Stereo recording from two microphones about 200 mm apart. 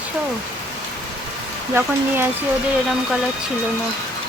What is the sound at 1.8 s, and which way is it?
Speech, 10° right (ahead or behind).